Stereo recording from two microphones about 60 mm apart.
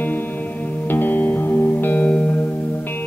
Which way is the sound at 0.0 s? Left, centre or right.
Left.